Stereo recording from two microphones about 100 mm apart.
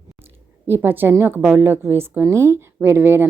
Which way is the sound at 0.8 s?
20° right (ahead or behind).